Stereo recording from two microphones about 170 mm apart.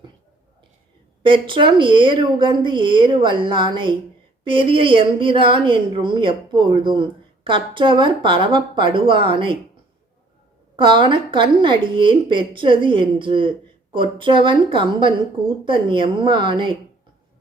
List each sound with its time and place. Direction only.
1.2 s a woman's voice: 30° right (ahead or behind)
10.8 s a woman's voice: 30° right (ahead or behind)